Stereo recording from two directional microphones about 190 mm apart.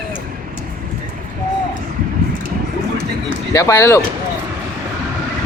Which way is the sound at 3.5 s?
15° left (ahead or behind).